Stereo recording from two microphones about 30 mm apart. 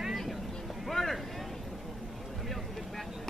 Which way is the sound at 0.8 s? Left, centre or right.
Centre.